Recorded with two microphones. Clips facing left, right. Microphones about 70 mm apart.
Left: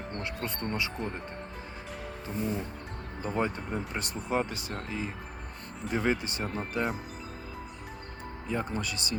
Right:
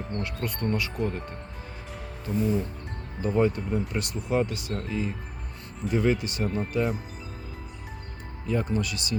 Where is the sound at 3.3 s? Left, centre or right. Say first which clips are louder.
Right 7 dB; left.